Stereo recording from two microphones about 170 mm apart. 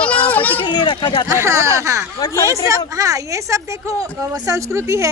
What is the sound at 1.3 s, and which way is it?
A woman's voice, 15° right (ahead or behind).